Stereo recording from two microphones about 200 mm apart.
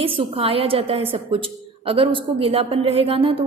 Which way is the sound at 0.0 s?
30° right (ahead or behind).